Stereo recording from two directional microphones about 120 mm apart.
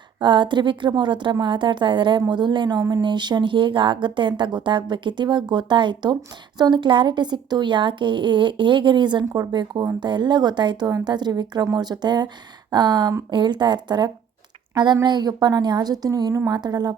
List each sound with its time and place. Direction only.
0.2 s speech: 40° right (ahead or behind)